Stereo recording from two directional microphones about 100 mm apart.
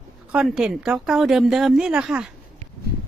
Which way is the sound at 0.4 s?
5° right (ahead or behind).